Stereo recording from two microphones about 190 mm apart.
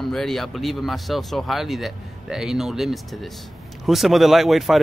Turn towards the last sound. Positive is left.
turn(degrees=0)  # may be behind; listen again after turning